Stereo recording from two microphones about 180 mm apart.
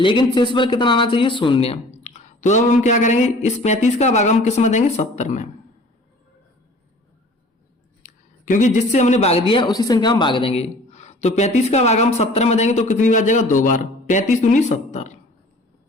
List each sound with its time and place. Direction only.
0.0 s speech: 25° left (ahead or behind); by 5.5 s 40° left (ahead or behind)
8.0 s speech: 45° left (ahead or behind)